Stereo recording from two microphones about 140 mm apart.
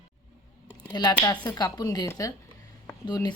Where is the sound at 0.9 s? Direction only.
30° left (ahead or behind).